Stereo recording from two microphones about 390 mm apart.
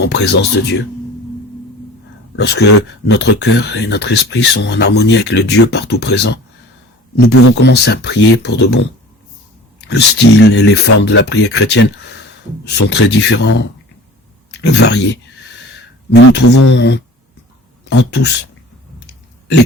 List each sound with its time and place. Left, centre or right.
0.0 s speech: left
2.3 s speech: left
9.9 s speech: left